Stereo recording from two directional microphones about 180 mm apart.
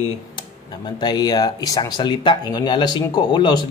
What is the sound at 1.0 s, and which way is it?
Speech, 25° left (ahead or behind).